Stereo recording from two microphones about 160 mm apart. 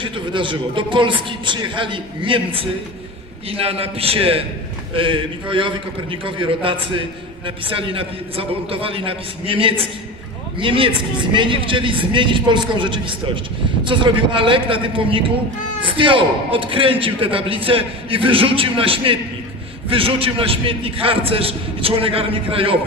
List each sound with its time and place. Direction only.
0.0 s a man's voice: 30° right (ahead or behind)